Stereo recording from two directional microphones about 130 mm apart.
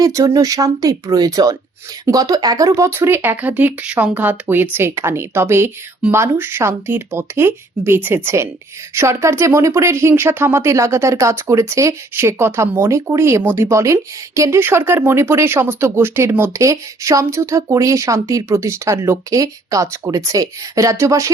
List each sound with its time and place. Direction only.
0.0 s speech: 25° right (ahead or behind)